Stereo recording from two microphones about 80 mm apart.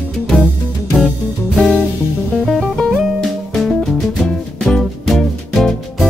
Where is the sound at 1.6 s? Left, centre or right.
Centre.